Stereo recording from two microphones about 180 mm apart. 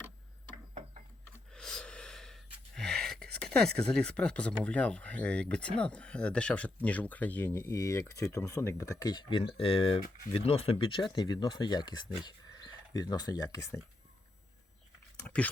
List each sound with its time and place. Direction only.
1.5 s gasp: 5° left (ahead or behind)
4.6 s speech: 5° left (ahead or behind)